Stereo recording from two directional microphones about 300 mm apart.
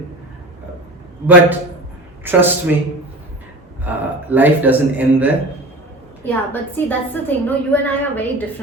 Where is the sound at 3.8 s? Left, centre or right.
Centre.